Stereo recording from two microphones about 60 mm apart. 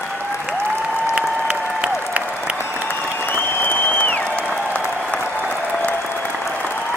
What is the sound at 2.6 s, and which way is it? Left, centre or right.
Applause, left.